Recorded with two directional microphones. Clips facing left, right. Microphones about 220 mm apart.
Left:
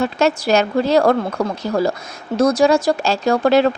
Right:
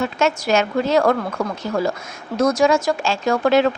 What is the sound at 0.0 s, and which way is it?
Speech, 35° left (ahead or behind).